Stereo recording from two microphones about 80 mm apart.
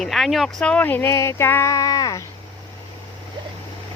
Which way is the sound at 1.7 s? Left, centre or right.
Left.